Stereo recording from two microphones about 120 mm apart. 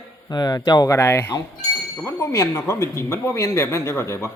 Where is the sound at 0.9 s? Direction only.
15° left (ahead or behind).